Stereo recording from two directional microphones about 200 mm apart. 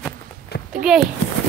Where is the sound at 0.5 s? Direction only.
50° left (ahead or behind).